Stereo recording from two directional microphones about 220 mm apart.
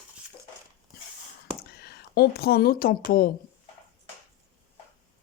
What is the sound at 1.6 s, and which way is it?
Speech, 45° left (ahead or behind).